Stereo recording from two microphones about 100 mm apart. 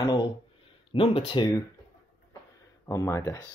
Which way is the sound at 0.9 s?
65° left (ahead or behind).